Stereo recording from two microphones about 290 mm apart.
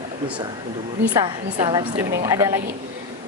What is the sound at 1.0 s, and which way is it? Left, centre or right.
A woman's voice, centre.